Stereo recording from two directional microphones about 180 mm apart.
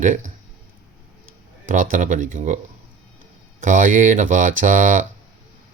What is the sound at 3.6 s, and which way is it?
Speech, 45° right (ahead or behind).